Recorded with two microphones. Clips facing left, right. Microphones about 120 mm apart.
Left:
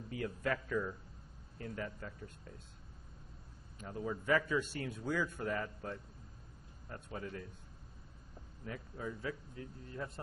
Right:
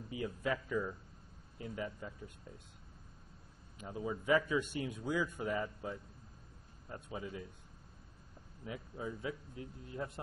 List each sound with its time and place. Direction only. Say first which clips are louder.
0.1 s speech: even; 10° right (ahead or behind)
3.8 s speech: even; 10° right (ahead or behind)
8.6 s a man's voice: right 1 dB; 15° right (ahead or behind)